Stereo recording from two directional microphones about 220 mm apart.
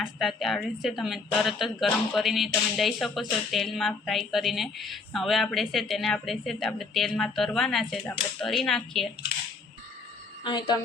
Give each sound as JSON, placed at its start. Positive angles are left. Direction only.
{"t": 0.0, "sound": "speech", "side_deg": 0}
{"t": 10.4, "sound": "a woman's voice", "side_deg": 20}